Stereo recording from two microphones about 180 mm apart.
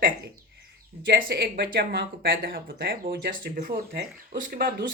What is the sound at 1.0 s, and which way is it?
Speech, 65° right (ahead or behind).